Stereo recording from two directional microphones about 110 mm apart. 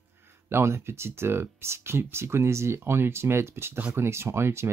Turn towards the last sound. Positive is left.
turn(degrees=-25)  # may be behind; listen again after turning